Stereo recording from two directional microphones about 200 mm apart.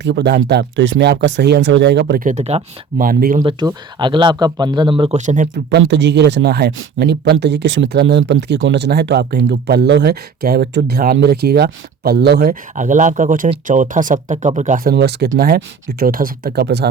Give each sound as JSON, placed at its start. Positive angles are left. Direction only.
{"t": 0.0, "sound": "speech", "side_deg": -60}
{"t": 2.2, "sound": "speech", "side_deg": -35}
{"t": 3.0, "sound": "speech", "side_deg": -45}
{"t": 3.7, "sound": "speech", "side_deg": -20}
{"t": 5.2, "sound": "speech", "side_deg": -40}
{"t": 5.7, "sound": "speech", "side_deg": -60}
{"t": 12.7, "sound": "speech", "side_deg": -40}
{"t": 14.9, "sound": "speech", "side_deg": -55}